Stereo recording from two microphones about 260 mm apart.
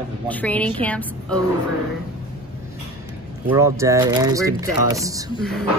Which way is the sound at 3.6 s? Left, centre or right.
Centre.